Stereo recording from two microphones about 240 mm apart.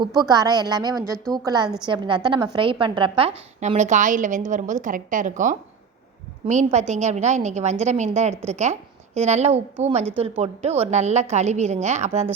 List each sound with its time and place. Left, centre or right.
0.0 s a woman's voice: centre